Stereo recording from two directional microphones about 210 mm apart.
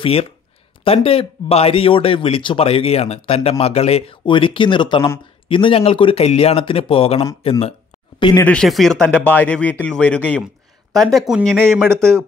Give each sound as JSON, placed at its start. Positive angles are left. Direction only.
{"t": 0.0, "sound": "speech", "side_deg": 25}
{"t": 8.5, "sound": "speech", "side_deg": 0}